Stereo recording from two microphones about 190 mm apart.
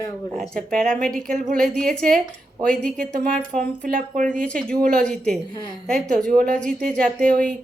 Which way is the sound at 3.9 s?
45° right (ahead or behind).